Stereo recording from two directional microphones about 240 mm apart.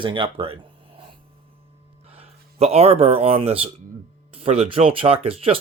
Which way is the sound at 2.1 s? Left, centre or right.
Right.